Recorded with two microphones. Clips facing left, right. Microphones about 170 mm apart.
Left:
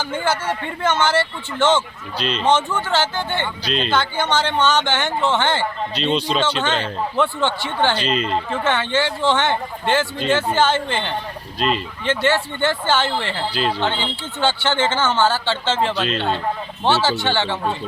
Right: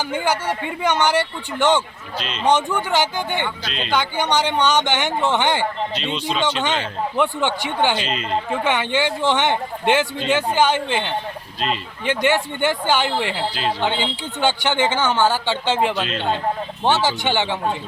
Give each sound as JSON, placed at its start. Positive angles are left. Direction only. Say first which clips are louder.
{"t": 0.0, "sound": "speech", "louder": "even", "side_deg": -15}
{"t": 2.1, "sound": "speech", "louder": "left 5 dB", "side_deg": 35}
{"t": 2.4, "sound": "speech", "louder": "right 1 dB", "side_deg": -15}
{"t": 5.9, "sound": "speech", "louder": "left 4 dB", "side_deg": 35}
{"t": 6.6, "sound": "speech", "louder": "left 1 dB", "side_deg": -15}